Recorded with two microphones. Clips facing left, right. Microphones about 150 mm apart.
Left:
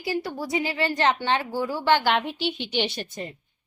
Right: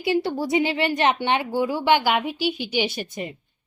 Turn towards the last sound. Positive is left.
turn(degrees=-10)  # may be behind; listen again after turning